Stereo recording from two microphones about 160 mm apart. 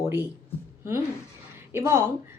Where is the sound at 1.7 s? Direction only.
15° right (ahead or behind).